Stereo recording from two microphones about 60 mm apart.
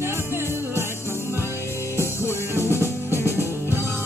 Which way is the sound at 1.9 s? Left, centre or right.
Left.